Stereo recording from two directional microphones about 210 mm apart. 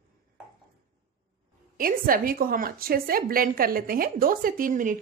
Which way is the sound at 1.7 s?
45° right (ahead or behind).